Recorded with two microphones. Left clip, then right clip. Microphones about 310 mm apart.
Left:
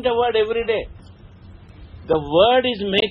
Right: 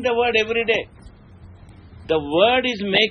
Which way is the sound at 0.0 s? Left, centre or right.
Centre.